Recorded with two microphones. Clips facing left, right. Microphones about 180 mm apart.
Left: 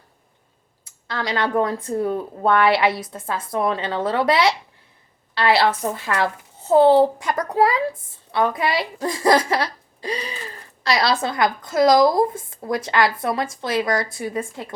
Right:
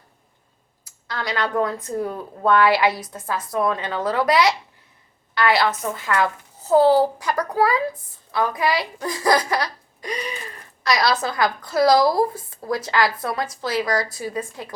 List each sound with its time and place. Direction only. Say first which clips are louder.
0.9 s a woman's voice: left 2 dB; 25° left (ahead or behind)